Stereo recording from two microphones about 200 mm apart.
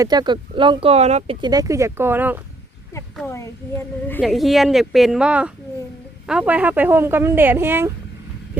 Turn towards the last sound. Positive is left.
turn(degrees=-10)  # may be behind; listen again after turning